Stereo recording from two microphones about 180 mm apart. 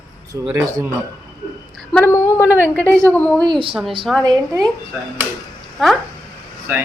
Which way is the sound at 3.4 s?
25° right (ahead or behind).